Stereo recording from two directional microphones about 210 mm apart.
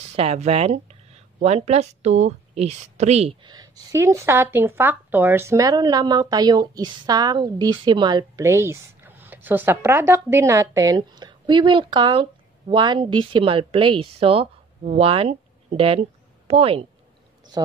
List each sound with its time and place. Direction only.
0.1 s speech: 30° right (ahead or behind)